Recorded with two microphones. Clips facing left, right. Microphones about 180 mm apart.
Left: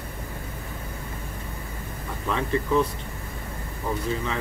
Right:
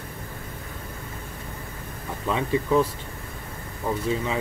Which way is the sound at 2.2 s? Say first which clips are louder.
Right 1 dB; 10° right (ahead or behind).